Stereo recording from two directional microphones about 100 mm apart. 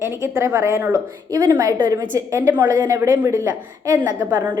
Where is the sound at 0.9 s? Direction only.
40° right (ahead or behind).